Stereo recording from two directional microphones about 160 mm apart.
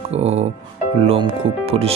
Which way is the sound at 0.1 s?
40° right (ahead or behind).